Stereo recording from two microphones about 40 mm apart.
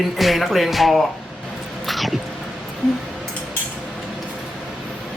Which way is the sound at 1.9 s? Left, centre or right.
Centre.